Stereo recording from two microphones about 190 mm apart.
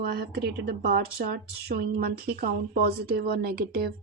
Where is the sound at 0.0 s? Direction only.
55° right (ahead or behind).